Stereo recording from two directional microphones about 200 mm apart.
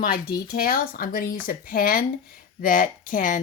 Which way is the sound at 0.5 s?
45° left (ahead or behind).